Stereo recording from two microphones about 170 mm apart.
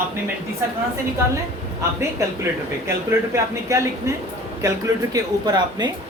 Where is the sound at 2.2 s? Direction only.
20° right (ahead or behind).